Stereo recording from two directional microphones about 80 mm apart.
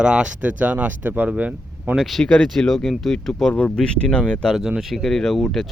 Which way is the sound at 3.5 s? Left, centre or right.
Centre.